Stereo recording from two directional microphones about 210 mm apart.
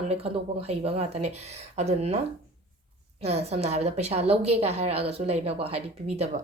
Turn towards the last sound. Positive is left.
turn(degrees=-30)  # may be behind; listen again after turning